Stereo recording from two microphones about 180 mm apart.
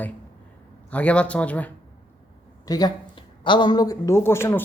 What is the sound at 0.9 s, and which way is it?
Speech, 5° left (ahead or behind).